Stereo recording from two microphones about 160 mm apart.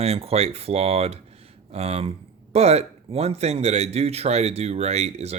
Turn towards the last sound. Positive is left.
turn(degrees=-40)  # may be behind; listen again after turning